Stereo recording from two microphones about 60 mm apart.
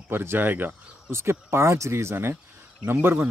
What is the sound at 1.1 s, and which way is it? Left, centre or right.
Speech, right.